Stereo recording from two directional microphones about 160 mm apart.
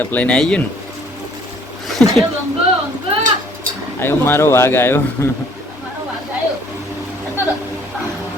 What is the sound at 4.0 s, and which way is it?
Speech, 15° left (ahead or behind).